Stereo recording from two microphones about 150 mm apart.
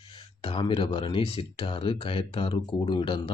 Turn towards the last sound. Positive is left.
turn(degrees=35)  # may be behind; listen again after turning